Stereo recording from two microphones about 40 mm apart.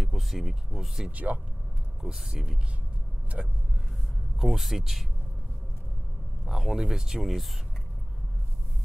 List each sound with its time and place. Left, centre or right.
0.0 s speech: centre
1.1 s speech: right
2.0 s speech: centre
3.4 s vehicle: right
4.4 s speech: centre
6.4 s speech: centre